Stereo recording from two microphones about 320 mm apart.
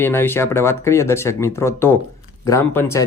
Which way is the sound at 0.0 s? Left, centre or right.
Centre.